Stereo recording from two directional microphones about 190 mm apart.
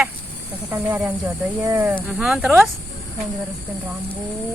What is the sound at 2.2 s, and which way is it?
Speech, centre (ahead or behind).